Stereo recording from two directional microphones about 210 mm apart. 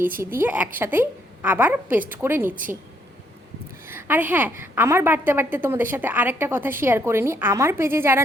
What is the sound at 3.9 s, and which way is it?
A woman's voice, 10° right (ahead or behind).